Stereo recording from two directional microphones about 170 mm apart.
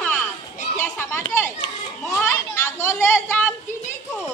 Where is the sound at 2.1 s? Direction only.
15° left (ahead or behind).